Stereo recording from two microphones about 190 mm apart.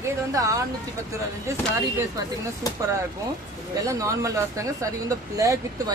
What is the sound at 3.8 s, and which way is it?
Speech, 15° right (ahead or behind).